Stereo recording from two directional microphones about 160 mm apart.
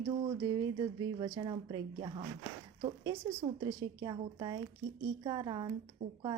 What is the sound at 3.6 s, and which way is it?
A woman's voice, 25° right (ahead or behind).